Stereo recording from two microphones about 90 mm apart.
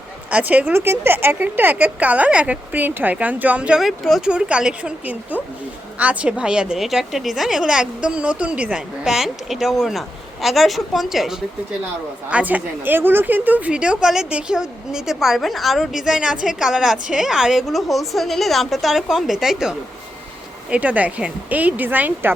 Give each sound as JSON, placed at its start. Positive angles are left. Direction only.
{"t": 0.3, "sound": "a woman's voice", "side_deg": -15}
{"t": 4.2, "sound": "a woman's voice", "side_deg": -10}
{"t": 12.3, "sound": "a woman's voice", "side_deg": -15}